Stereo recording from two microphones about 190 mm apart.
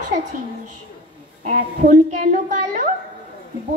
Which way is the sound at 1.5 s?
40° right (ahead or behind).